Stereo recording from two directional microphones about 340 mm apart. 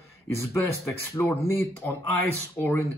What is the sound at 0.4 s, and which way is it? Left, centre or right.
Speech, centre.